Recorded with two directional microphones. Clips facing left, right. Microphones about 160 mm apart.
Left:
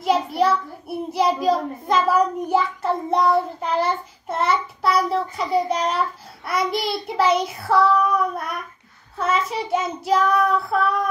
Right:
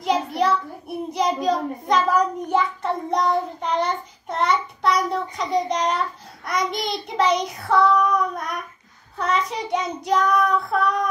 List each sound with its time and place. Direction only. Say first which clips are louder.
0.0 s a child's voice: left 2 dB; centre (ahead or behind)